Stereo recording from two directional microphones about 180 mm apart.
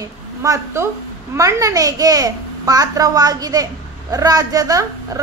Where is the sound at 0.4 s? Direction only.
15° right (ahead or behind).